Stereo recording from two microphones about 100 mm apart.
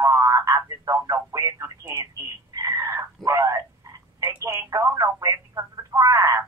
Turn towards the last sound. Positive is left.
turn(degrees=-35)  # may be behind; listen again after turning